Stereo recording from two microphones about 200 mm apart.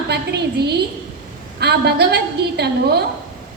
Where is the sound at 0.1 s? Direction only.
55° right (ahead or behind).